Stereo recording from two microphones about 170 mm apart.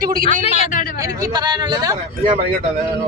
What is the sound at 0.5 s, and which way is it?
Speech, 50° left (ahead or behind).